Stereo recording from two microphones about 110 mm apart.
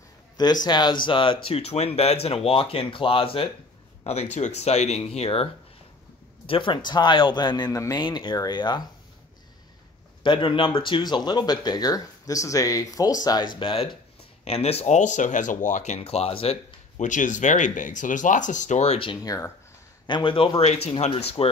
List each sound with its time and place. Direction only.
0.4 s speech: 40° left (ahead or behind); by 3.4 s 55° left (ahead or behind)
4.0 s speech: 80° left; by 5.5 s 65° left (ahead or behind)
6.4 s a man's voice: 50° left (ahead or behind)
10.2 s speech: 45° left (ahead or behind)
14.4 s speech: 65° left (ahead or behind); by 18.9 s 90° left
19.2 s speech: 30° left (ahead or behind)
20.1 s a man's voice: 50° left (ahead or behind)